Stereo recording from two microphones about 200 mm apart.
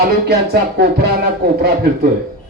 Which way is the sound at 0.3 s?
50° right (ahead or behind).